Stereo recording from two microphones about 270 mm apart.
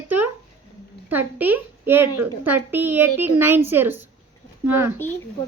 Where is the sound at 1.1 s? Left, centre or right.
Centre.